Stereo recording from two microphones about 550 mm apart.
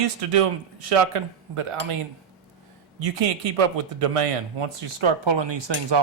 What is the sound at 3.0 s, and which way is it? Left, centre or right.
Speech, right.